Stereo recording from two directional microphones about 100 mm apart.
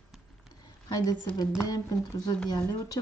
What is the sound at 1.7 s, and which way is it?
Speech, 40° left (ahead or behind).